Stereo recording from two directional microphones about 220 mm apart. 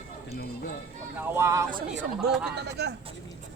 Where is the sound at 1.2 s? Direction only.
10° right (ahead or behind).